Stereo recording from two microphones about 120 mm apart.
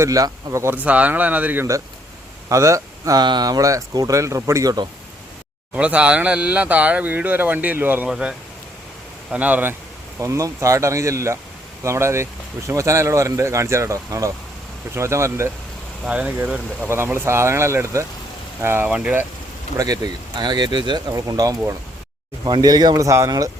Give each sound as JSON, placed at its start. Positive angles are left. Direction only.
{"t": 0.0, "sound": "speech", "side_deg": -25}
{"t": 2.5, "sound": "speech", "side_deg": -25}
{"t": 5.7, "sound": "speech", "side_deg": -10}
{"t": 10.2, "sound": "speech", "side_deg": -25}
{"t": 16.0, "sound": "speech", "side_deg": -10}
{"t": 18.9, "sound": "speech", "side_deg": -10}
{"t": 19.7, "sound": "speech", "side_deg": -30}